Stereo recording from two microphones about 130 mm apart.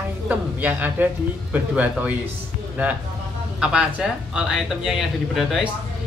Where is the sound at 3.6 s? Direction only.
5° right (ahead or behind).